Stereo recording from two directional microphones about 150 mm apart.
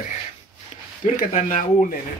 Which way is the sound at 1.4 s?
50° left (ahead or behind).